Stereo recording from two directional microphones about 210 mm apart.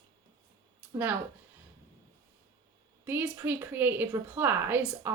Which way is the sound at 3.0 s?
10° right (ahead or behind).